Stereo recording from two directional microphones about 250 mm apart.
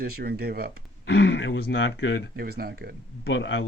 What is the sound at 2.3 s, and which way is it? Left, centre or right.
Speech, right.